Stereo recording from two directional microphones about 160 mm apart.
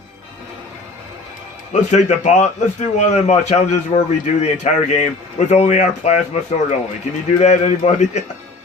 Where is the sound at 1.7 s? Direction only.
45° left (ahead or behind).